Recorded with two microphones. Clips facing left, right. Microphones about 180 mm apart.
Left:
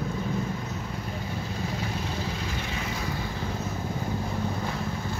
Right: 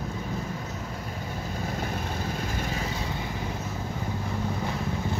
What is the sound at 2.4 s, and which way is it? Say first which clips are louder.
Vehicle: right 2 dB; 45° right (ahead or behind).